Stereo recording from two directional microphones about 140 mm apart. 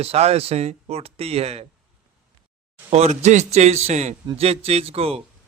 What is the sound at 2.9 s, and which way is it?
Speech, 50° right (ahead or behind).